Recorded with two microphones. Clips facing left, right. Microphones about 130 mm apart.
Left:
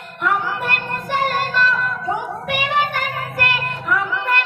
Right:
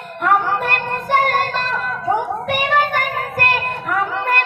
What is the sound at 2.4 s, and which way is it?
Child singing, 45° right (ahead or behind).